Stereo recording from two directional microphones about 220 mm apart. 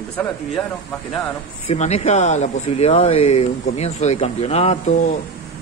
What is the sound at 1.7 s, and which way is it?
Speech, 30° left (ahead or behind).